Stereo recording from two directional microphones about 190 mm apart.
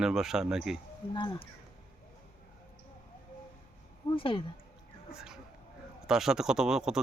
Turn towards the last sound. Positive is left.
turn(degrees=-5)  # may be behind; listen again after turning